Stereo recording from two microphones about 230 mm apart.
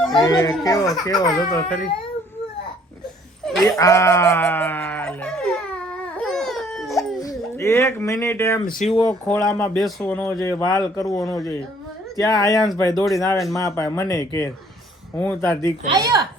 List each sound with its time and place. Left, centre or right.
0.2 s speech: centre
3.6 s sheep: centre
7.2 s speech: centre
8.6 s speech: left
9.2 s speech: centre
16.0 s speech: centre